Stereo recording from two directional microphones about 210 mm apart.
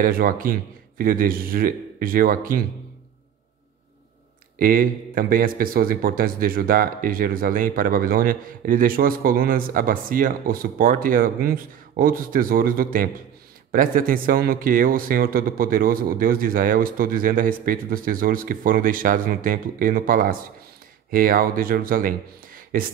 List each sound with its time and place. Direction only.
0.0 s a man's voice: 40° right (ahead or behind)
4.6 s a man's voice: 40° right (ahead or behind)